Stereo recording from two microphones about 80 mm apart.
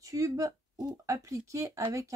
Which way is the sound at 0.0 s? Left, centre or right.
Right.